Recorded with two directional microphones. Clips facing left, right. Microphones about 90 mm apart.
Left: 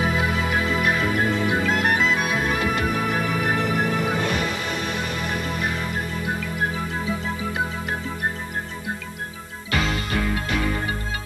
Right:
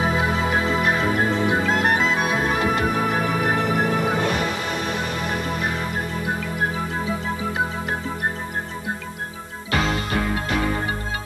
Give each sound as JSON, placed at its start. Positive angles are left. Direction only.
{"t": 0.0, "sound": "music", "side_deg": -30}
{"t": 9.7, "sound": "music", "side_deg": -30}